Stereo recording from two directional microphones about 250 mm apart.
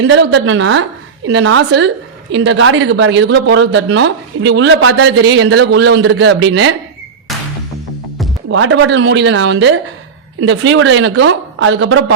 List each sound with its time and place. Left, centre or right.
0.1 s speech: right
8.4 s speech: right